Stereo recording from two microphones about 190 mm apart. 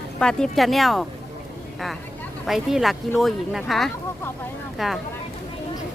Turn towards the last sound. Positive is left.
turn(degrees=0)  # may be behind; listen again after turning